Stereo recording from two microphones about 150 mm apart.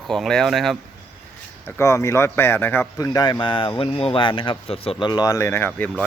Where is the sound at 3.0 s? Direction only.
25° left (ahead or behind).